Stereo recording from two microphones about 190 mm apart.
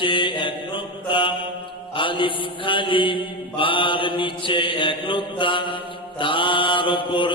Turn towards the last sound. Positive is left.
turn(degrees=25)  # may be behind; listen again after turning